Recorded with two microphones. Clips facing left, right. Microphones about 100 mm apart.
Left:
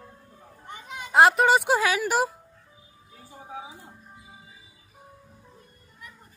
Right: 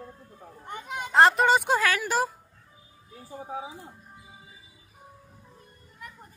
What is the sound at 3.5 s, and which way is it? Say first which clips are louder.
Speech: right 3 dB; 35° right (ahead or behind).